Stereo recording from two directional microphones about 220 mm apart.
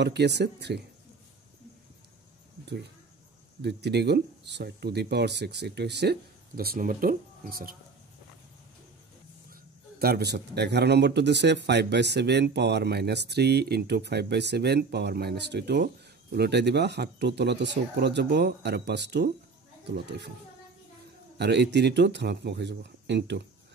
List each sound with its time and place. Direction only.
0.0 s speech: 50° right (ahead or behind)
3.6 s speech: 50° right (ahead or behind)
9.5 s speech: 45° right (ahead or behind)
21.4 s speech: 50° right (ahead or behind)